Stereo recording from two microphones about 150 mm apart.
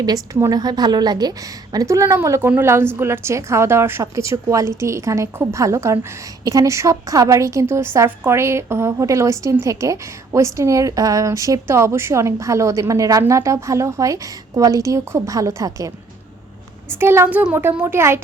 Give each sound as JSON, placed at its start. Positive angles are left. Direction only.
{"t": 0.0, "sound": "a woman's voice", "side_deg": -20}
{"t": 16.9, "sound": "a woman's voice", "side_deg": -15}